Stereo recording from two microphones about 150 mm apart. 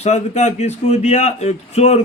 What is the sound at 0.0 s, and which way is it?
Speech, 50° left (ahead or behind).